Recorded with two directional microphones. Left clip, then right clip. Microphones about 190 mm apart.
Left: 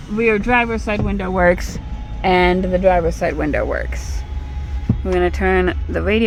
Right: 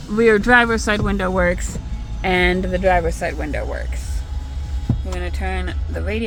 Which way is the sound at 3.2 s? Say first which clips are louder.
Left 6 dB; 35° left (ahead or behind).